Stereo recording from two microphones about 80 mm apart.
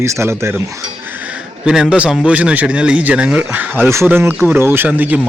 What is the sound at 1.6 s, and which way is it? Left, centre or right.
A man's voice, centre.